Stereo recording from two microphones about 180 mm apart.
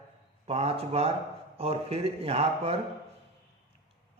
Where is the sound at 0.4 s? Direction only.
35° right (ahead or behind).